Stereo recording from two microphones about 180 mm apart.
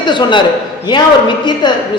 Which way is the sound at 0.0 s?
25° left (ahead or behind).